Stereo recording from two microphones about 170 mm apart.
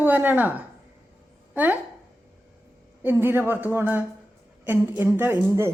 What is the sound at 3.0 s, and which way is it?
A woman's voice, 15° right (ahead or behind).